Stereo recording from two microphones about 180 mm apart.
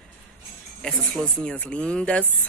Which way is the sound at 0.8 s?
5° left (ahead or behind).